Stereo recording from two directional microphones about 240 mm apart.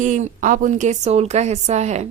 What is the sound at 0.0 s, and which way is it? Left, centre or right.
A woman's voice, right.